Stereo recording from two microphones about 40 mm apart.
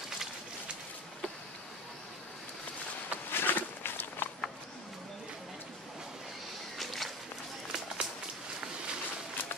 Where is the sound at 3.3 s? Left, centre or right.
Left.